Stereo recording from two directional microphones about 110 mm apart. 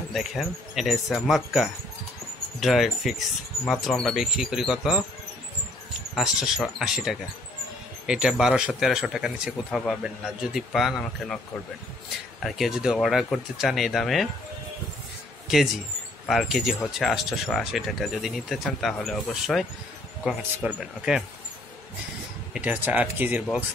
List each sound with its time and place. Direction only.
0.1 s speech: 5° right (ahead or behind)
6.1 s speech: 5° right (ahead or behind)
12.4 s speech: centre (ahead or behind)
15.4 s a sound: 5° right (ahead or behind)
16.3 s speech: centre (ahead or behind)
22.5 s speech: 10° right (ahead or behind)